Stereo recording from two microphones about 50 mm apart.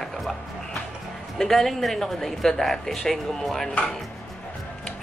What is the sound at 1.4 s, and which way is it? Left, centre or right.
Speech, centre.